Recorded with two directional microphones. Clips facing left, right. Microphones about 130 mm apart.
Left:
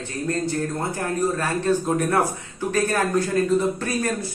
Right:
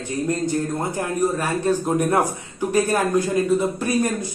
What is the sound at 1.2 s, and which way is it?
A man's voice, 15° right (ahead or behind).